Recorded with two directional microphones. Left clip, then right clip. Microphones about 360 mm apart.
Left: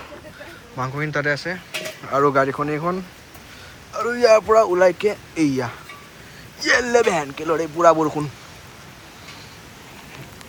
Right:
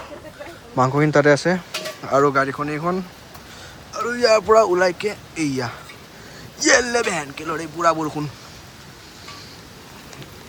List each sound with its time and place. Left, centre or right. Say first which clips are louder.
0.8 s speech: right 8 dB; centre